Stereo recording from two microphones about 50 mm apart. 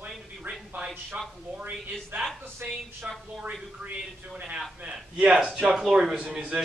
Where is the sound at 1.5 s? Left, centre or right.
Right.